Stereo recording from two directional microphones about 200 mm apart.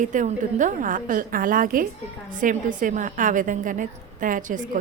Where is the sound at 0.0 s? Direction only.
40° right (ahead or behind).